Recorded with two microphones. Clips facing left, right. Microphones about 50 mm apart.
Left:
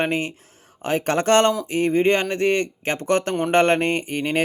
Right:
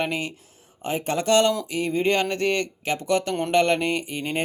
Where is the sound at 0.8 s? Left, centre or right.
Left.